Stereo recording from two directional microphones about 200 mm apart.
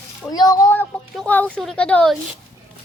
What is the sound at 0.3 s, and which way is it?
Speech, 20° left (ahead or behind).